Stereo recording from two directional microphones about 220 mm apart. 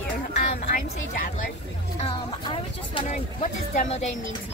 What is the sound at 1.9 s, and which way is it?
Speech, 25° left (ahead or behind).